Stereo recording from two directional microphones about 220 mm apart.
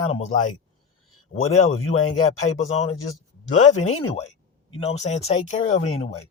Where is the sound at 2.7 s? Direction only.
30° left (ahead or behind).